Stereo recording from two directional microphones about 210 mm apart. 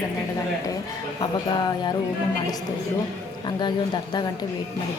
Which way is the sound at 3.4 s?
20° left (ahead or behind).